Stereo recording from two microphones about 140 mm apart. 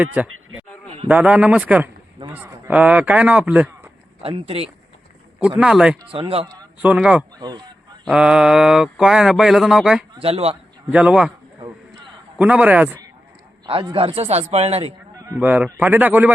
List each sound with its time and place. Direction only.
0.0 s speech: 10° right (ahead or behind)
4.2 s a man's voice: 45° right (ahead or behind)
5.5 s speech: 5° right (ahead or behind)
6.1 s speech: 40° right (ahead or behind)
6.8 s speech: 10° right (ahead or behind)
7.3 s speech: 30° right (ahead or behind)
8.0 s speech: 5° right (ahead or behind)
10.2 s a man's voice: 45° right (ahead or behind)
10.9 s speech: 5° right (ahead or behind)
12.4 s speech: 10° right (ahead or behind)
13.7 s a man's voice: 40° right (ahead or behind)
15.4 s speech: 10° right (ahead or behind)